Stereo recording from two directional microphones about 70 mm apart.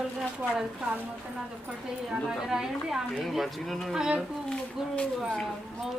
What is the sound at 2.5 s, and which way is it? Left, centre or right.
Speech, centre.